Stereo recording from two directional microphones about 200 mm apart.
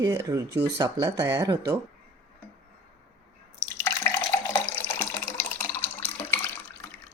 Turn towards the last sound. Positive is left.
turn(degrees=10)  # may be behind; listen again after turning